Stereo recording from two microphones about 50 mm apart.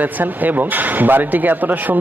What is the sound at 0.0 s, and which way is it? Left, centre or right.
Speech, right.